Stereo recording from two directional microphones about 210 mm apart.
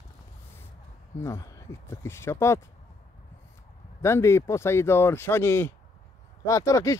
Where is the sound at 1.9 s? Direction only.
10° left (ahead or behind).